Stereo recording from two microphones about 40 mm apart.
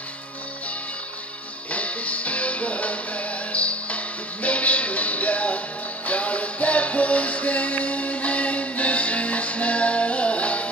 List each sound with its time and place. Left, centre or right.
1.7 s music: left